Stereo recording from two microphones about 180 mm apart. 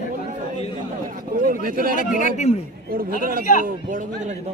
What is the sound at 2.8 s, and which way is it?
A man's voice, 55° right (ahead or behind).